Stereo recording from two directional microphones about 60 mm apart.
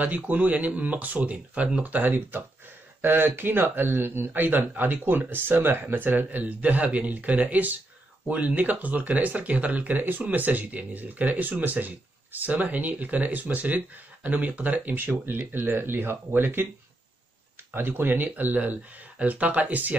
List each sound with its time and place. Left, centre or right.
0.0 s speech: right
17.7 s speech: right